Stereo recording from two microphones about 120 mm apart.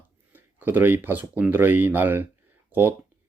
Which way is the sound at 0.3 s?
15° right (ahead or behind).